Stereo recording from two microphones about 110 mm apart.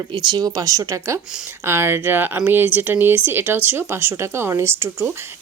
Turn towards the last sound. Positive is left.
turn(degrees=-25)  # may be behind; listen again after turning